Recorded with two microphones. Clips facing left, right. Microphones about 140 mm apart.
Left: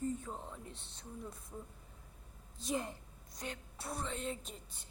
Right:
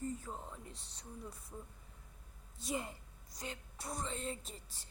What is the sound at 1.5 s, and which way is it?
Speech, 5° left (ahead or behind).